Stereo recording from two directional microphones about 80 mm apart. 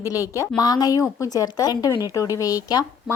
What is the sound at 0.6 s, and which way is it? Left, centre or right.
A woman's voice, left.